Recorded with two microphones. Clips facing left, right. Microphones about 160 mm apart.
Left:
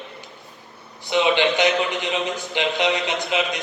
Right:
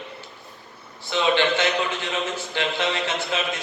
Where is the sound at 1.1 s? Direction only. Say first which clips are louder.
Left 2 dB; 15° left (ahead or behind).